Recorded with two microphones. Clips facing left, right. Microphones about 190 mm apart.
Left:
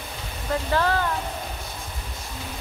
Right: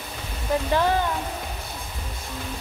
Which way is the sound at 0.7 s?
15° right (ahead or behind).